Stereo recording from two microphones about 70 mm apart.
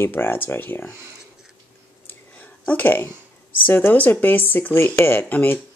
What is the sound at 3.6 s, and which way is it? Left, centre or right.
Speech, left.